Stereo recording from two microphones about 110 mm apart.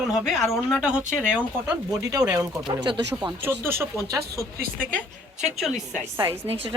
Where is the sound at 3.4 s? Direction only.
20° right (ahead or behind).